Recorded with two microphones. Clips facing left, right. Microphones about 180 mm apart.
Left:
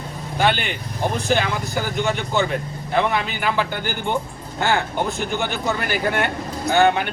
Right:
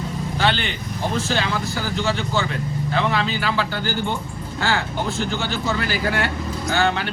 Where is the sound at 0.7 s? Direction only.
15° left (ahead or behind).